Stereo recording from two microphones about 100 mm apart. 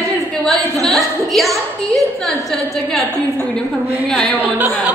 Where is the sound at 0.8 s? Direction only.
Centre (ahead or behind).